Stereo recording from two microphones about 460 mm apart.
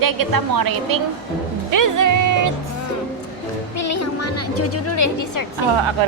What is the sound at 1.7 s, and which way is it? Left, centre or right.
Music, right.